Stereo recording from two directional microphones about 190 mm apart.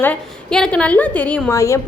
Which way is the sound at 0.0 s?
5° left (ahead or behind).